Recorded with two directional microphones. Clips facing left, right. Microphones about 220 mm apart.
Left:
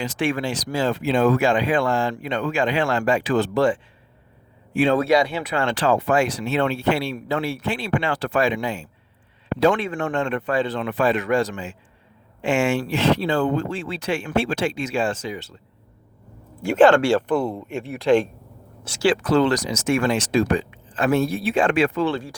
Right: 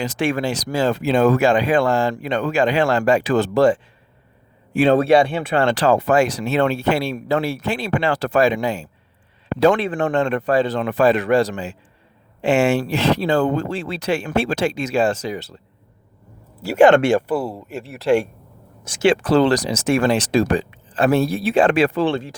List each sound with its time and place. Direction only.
0.0 s speech: 40° right (ahead or behind)
16.6 s speech: 10° right (ahead or behind)
16.9 s speech: 20° right (ahead or behind)
17.2 s speech: 5° right (ahead or behind)
18.8 s speech: 20° right (ahead or behind)